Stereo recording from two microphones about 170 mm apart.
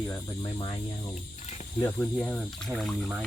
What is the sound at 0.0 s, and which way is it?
Cricket, 25° left (ahead or behind).